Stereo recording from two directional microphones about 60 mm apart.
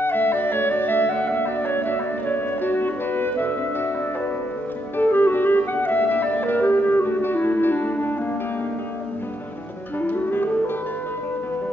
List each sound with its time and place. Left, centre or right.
0.0 s music: left
4.9 s music: left
10.0 s music: left